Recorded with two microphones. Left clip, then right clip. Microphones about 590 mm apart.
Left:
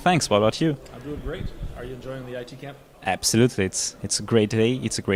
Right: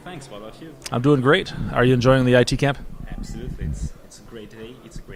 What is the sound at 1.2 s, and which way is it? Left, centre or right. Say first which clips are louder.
Speech: right 17 dB; right.